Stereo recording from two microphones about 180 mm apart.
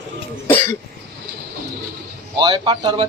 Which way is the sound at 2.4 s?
25° right (ahead or behind).